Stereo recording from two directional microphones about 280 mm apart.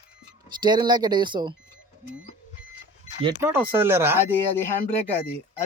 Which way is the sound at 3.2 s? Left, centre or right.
Centre.